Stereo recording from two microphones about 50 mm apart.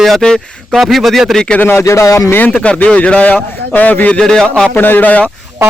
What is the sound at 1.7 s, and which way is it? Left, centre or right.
Speech, left.